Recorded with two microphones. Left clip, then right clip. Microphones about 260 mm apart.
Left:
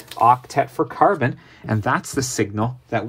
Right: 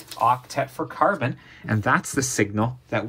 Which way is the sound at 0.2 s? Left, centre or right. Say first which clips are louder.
Left 6 dB; left.